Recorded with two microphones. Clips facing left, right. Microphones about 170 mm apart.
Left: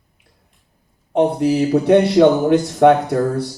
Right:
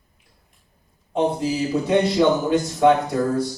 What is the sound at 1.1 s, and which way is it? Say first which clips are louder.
Speech: left 6 dB; 65° left (ahead or behind).